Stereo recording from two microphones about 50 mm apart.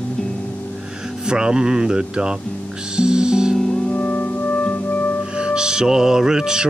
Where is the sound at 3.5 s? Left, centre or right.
Centre.